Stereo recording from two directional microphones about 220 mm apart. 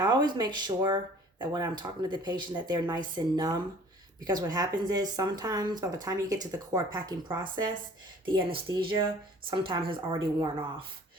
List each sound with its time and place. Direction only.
0.0 s speech: 20° right (ahead or behind)